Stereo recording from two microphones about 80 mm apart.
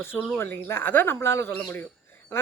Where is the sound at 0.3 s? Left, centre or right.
Left.